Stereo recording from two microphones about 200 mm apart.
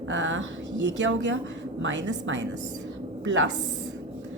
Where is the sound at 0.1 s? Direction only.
70° right (ahead or behind).